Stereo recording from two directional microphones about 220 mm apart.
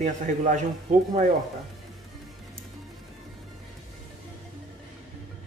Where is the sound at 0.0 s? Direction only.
35° right (ahead or behind).